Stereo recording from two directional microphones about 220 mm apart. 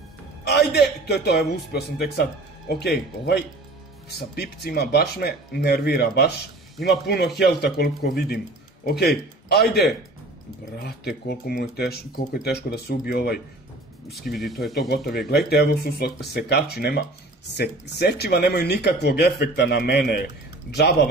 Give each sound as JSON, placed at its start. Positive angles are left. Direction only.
{"t": 0.5, "sound": "speech", "side_deg": 45}
{"t": 14.3, "sound": "speech", "side_deg": 0}
{"t": 15.0, "sound": "speech", "side_deg": 45}